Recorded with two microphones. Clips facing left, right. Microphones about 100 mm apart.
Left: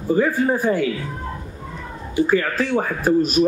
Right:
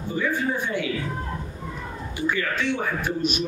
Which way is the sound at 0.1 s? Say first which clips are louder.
Left 8 dB; 40° left (ahead or behind).